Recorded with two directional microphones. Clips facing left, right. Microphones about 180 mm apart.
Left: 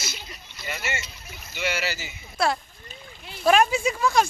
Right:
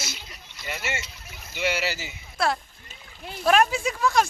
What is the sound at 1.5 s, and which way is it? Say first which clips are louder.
Speech: right 2 dB; 30° right (ahead or behind).